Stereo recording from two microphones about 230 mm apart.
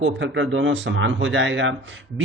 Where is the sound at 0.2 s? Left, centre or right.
Right.